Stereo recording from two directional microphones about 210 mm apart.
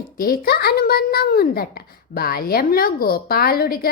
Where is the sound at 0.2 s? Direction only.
45° left (ahead or behind).